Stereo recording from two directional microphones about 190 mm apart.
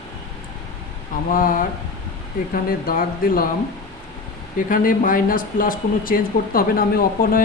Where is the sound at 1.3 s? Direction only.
45° left (ahead or behind).